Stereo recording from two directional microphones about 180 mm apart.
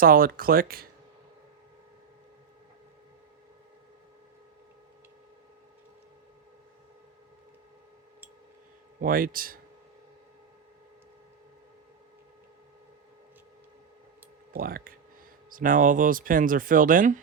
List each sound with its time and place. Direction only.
0.0 s speech: 55° right (ahead or behind)
9.0 s speech: 50° right (ahead or behind)
14.5 s speech: 55° right (ahead or behind)